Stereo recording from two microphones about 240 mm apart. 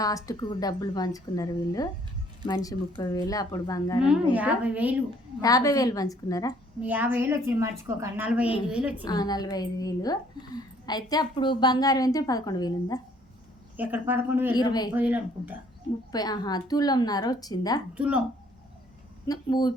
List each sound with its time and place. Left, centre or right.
0.0 s a woman's voice: centre
4.0 s a woman's voice: centre
5.4 s a woman's voice: centre
6.8 s a woman's voice: centre
9.0 s a woman's voice: centre
13.7 s a woman's voice: centre
14.5 s a woman's voice: centre
14.9 s a woman's voice: centre
16.1 s a woman's voice: centre
17.9 s a woman's voice: centre
19.3 s a woman's voice: centre